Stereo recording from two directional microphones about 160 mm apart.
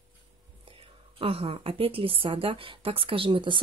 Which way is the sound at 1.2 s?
35° right (ahead or behind).